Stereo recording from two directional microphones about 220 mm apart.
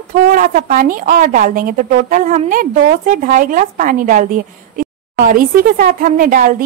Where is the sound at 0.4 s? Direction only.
40° right (ahead or behind).